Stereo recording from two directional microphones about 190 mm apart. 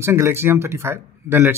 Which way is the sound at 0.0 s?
15° right (ahead or behind).